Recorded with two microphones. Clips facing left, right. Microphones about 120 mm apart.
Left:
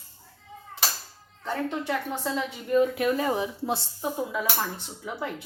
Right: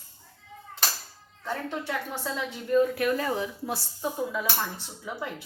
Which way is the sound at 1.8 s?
15° left (ahead or behind).